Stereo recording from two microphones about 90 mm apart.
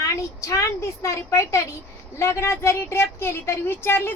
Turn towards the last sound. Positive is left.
turn(degrees=25)  # may be behind; listen again after turning